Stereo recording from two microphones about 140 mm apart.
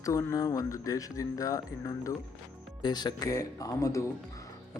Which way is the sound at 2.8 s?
30° left (ahead or behind).